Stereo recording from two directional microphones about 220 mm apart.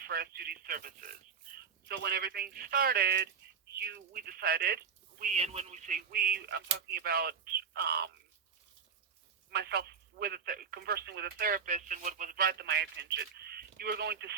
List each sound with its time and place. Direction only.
0.0 s speech: 45° right (ahead or behind)
5.2 s speech: 30° right (ahead or behind); by 8.1 s 45° right (ahead or behind)
9.5 s speech: 45° right (ahead or behind)